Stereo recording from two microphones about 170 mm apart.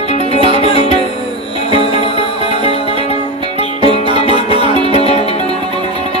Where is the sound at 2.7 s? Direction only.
35° left (ahead or behind).